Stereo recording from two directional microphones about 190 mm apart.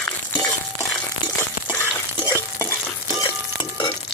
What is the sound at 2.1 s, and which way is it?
Stir, 15° left (ahead or behind).